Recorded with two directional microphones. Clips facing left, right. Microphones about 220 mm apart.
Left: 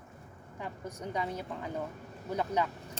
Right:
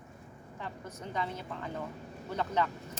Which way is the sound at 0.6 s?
15° left (ahead or behind).